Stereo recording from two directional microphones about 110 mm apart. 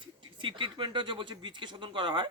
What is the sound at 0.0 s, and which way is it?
Speech, 45° right (ahead or behind).